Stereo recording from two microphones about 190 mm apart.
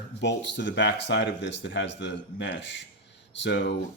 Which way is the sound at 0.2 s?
65° left (ahead or behind).